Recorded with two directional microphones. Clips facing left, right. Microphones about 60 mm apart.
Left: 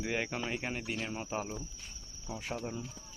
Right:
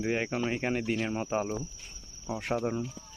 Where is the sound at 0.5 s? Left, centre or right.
Right.